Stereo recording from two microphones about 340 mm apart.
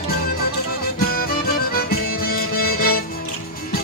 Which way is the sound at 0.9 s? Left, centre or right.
Left.